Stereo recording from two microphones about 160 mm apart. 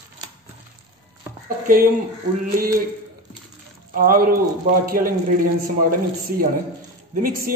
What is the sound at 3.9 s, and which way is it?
A man's voice, 60° right (ahead or behind).